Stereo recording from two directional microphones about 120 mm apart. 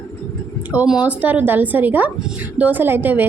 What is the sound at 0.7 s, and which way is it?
Speech, 10° right (ahead or behind).